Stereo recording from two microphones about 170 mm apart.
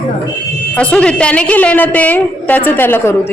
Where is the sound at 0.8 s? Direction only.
5° left (ahead or behind).